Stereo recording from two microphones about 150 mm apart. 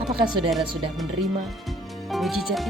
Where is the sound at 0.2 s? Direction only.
30° right (ahead or behind).